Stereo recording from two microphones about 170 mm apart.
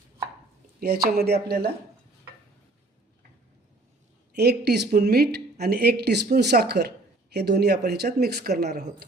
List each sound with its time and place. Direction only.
0.8 s speech: 65° right (ahead or behind)
4.4 s speech: 70° right (ahead or behind)